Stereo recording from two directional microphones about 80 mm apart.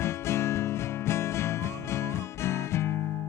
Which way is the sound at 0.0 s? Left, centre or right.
Left.